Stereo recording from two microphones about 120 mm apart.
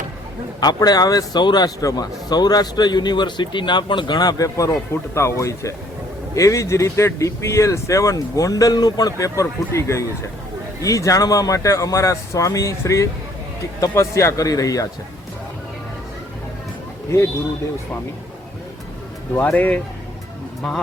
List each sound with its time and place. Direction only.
0.6 s a man's voice: 35° left (ahead or behind)
19.4 s speech: 15° left (ahead or behind)
20.6 s a man's voice: 5° left (ahead or behind)